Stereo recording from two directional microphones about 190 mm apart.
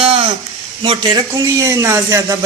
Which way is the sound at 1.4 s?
15° right (ahead or behind).